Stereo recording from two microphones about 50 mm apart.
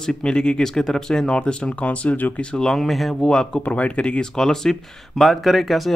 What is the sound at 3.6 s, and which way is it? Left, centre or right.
Speech, left.